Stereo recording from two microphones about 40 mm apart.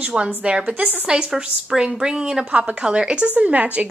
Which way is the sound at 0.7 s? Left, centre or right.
Right.